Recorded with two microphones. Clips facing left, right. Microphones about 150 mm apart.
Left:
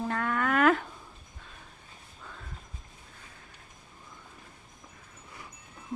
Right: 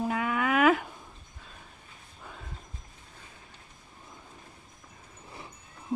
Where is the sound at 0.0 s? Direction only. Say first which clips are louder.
Right 1 dB; 10° right (ahead or behind).